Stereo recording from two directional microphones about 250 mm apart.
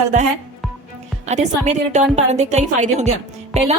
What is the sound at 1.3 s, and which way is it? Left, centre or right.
A woman's voice, right.